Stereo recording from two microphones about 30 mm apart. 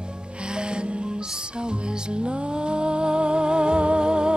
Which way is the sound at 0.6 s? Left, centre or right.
Right.